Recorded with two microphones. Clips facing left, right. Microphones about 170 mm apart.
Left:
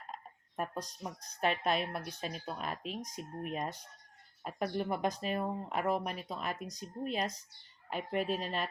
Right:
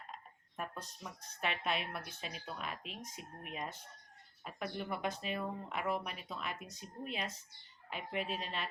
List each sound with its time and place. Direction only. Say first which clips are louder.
0.1 s speech: left 4 dB; 40° left (ahead or behind)